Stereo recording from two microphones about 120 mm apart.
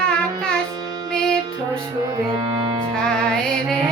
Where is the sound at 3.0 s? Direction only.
5° left (ahead or behind).